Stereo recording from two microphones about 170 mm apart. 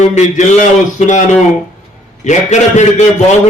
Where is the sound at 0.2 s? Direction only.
45° left (ahead or behind).